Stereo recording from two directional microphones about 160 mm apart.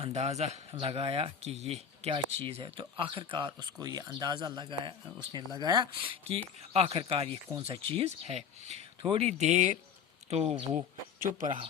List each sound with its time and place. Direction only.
0.0 s speech: 45° right (ahead or behind)
11.2 s speech: 55° right (ahead or behind)